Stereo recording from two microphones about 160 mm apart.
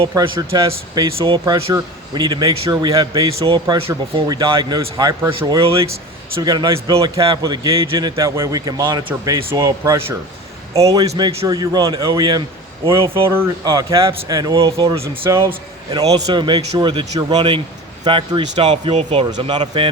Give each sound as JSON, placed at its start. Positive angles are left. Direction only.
{"t": 0.1, "sound": "a man's voice", "side_deg": -25}
{"t": 11.2, "sound": "speech", "side_deg": -40}
{"t": 11.4, "sound": "a man's voice", "side_deg": -25}